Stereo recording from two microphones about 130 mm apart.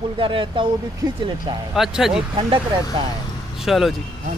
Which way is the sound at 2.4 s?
40° right (ahead or behind).